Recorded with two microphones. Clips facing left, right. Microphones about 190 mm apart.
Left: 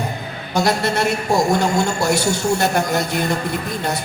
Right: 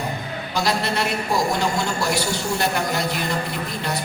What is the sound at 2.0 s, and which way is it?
Speech, 45° left (ahead or behind).